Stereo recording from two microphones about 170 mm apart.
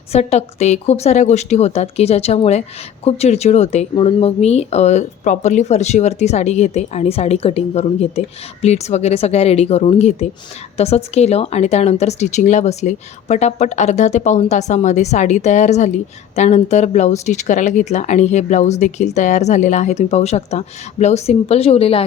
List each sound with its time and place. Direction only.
0.1 s speech: 40° left (ahead or behind)